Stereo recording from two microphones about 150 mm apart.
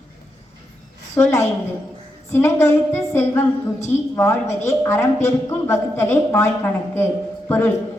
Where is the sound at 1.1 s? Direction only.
15° left (ahead or behind).